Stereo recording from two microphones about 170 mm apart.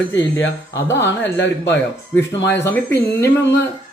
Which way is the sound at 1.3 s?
90° left.